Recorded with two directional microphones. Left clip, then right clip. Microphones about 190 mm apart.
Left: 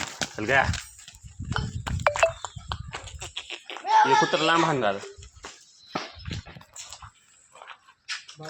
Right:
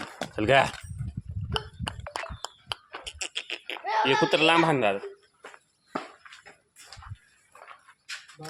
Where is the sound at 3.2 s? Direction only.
45° right (ahead or behind).